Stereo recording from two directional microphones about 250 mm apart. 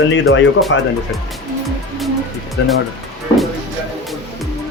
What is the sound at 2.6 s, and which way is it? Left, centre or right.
Speech, left.